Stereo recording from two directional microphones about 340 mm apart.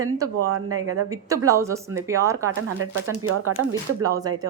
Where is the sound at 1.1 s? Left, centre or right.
Centre.